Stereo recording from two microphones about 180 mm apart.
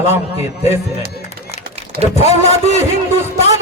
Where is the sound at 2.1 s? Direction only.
35° left (ahead or behind).